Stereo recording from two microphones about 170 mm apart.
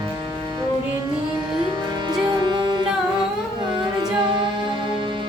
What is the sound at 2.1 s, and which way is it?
Music, 25° right (ahead or behind).